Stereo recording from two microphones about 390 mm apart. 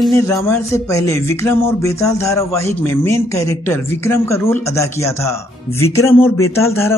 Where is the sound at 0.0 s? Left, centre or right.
Centre.